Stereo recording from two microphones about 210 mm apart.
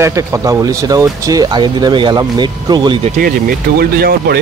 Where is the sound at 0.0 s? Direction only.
15° right (ahead or behind).